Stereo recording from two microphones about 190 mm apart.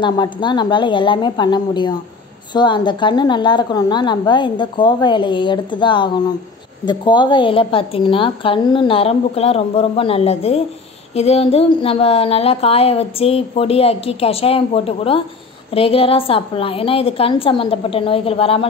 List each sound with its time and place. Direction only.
0.0 s a woman's voice: 25° left (ahead or behind)